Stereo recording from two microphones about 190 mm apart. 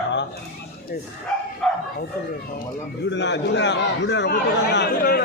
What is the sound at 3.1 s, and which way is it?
A man's voice, 65° left (ahead or behind).